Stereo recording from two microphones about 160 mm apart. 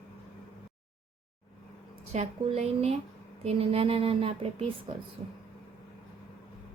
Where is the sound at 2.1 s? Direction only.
45° right (ahead or behind).